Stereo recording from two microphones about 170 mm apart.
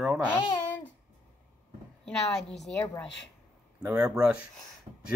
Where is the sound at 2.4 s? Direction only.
Centre (ahead or behind).